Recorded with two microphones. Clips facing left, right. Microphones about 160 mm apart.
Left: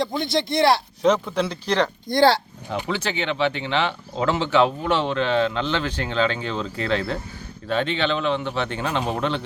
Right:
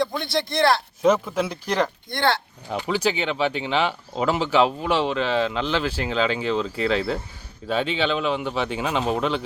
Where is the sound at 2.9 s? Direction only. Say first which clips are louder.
Right 4 dB; 10° right (ahead or behind).